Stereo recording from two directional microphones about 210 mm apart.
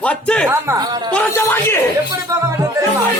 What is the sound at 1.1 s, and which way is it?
Speech, 10° left (ahead or behind).